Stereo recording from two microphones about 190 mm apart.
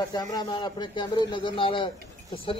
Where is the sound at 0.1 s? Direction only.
20° left (ahead or behind).